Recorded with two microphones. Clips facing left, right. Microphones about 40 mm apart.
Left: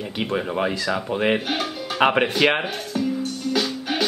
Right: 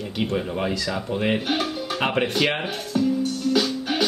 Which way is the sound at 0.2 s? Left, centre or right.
Centre.